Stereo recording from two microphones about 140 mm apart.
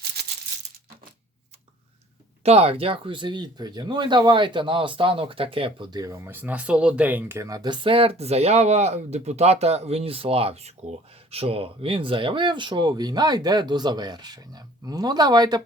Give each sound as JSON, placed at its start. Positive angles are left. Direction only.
{"t": 2.4, "sound": "speech", "side_deg": -45}